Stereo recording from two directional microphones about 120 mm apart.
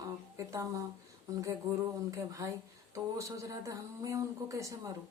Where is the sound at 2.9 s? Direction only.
25° right (ahead or behind).